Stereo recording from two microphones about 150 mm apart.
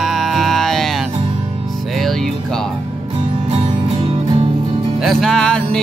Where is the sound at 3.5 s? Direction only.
40° right (ahead or behind).